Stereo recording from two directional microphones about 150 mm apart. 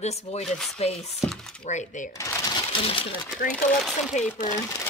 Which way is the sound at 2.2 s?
20° left (ahead or behind).